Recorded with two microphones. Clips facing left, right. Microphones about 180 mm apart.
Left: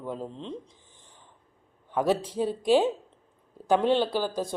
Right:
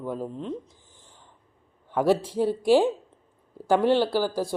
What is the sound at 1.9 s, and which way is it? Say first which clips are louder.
Speech: right 3 dB; 10° right (ahead or behind).